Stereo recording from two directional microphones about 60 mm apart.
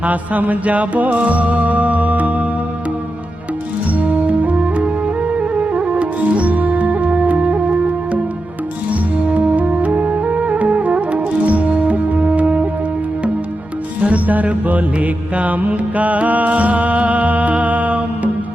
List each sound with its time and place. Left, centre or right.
0.0 s music: right
3.9 s music: right
14.0 s music: right